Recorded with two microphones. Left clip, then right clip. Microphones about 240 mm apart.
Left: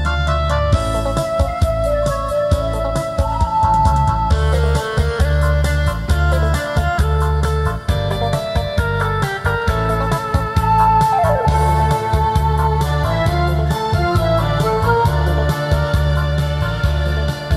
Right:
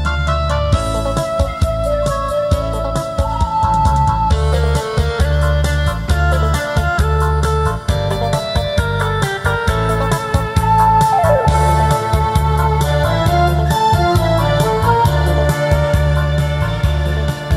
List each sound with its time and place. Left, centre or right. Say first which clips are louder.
3.6 s music: right 1 dB; right
10.7 s music: right 2 dB; right
13.2 s music: right 4 dB; right